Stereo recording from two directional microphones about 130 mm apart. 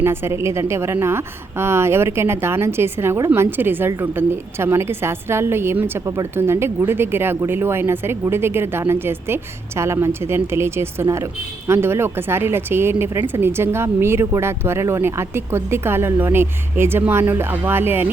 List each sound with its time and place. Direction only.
0.0 s a woman's voice: 20° right (ahead or behind)